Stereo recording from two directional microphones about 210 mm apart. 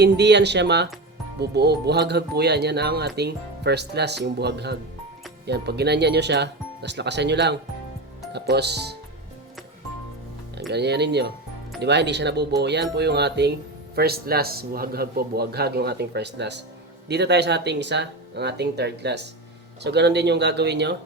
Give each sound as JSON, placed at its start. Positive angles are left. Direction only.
{"t": 0.0, "sound": "speech", "side_deg": -55}
{"t": 10.7, "sound": "speech", "side_deg": -50}